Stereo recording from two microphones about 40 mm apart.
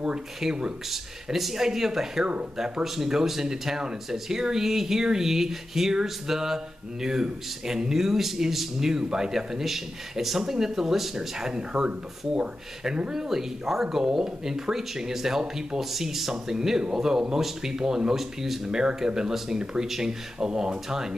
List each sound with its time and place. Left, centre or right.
0.4 s speech: centre
1.3 s speech: centre